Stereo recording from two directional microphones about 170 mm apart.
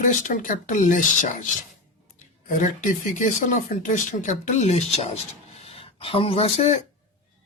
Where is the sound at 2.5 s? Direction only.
50° left (ahead or behind).